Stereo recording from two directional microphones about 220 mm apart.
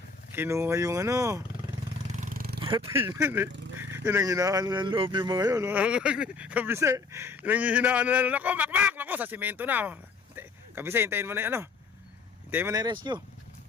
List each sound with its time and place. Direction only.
0.3 s speech: 10° right (ahead or behind)
2.1 s roar: 35° right (ahead or behind)
2.6 s speech: 20° right (ahead or behind)
3.2 s speech: 10° right (ahead or behind)